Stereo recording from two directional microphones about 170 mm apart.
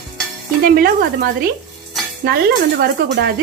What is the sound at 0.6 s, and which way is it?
A woman's voice, 60° right (ahead or behind).